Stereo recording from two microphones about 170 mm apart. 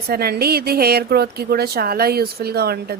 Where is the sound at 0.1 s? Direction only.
65° right (ahead or behind).